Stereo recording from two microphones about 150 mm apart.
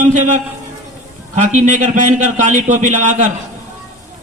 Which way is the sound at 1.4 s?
55° right (ahead or behind).